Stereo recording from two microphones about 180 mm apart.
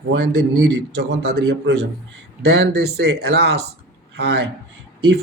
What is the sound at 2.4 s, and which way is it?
Speech, 65° right (ahead or behind).